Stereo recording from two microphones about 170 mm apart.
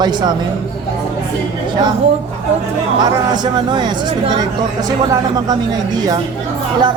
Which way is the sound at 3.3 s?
25° right (ahead or behind).